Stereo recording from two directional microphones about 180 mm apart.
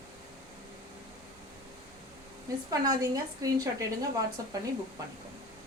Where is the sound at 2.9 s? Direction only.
20° right (ahead or behind).